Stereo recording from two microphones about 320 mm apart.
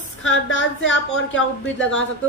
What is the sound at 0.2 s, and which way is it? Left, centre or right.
A woman's voice, left.